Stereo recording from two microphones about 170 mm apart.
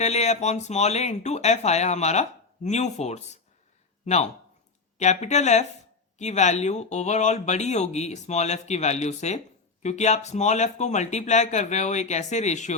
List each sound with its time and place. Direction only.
0.0 s speech: 40° left (ahead or behind)